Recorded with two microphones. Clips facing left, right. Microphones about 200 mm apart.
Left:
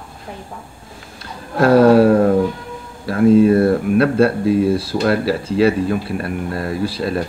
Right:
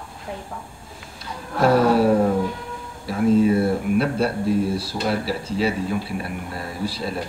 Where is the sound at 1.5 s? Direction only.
90° left.